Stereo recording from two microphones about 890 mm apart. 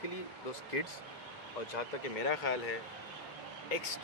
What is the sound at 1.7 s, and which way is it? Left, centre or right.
Speech, left.